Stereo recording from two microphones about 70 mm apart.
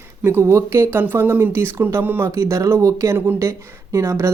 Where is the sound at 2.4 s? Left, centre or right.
Right.